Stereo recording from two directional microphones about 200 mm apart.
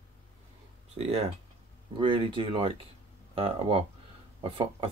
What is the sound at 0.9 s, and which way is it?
Speech, 30° right (ahead or behind).